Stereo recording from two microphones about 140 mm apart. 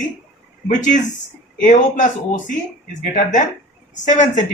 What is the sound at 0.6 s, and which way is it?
Speech, 50° right (ahead or behind).